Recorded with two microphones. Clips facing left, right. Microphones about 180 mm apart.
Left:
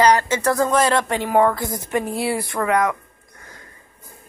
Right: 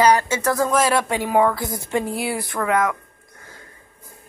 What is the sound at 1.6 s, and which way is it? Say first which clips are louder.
Speech: left 1 dB; 20° left (ahead or behind).